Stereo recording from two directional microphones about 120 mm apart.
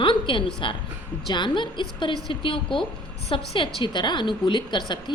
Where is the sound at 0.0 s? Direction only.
45° left (ahead or behind).